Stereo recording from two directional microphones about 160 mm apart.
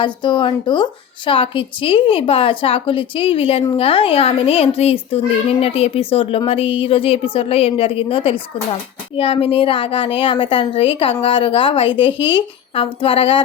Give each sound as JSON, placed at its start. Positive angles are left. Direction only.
{"t": 0.0, "sound": "a child's voice", "side_deg": 30}